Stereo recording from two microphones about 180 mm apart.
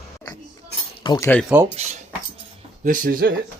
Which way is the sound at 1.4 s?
5° right (ahead or behind).